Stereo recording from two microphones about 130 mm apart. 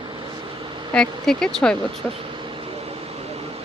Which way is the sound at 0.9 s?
5° left (ahead or behind).